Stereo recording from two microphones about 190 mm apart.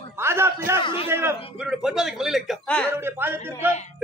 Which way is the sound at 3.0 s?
10° right (ahead or behind).